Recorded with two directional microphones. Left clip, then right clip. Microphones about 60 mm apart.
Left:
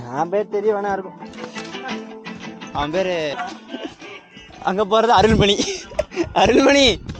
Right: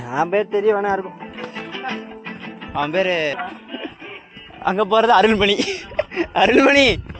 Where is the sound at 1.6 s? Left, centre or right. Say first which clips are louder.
Right 2 dB; left.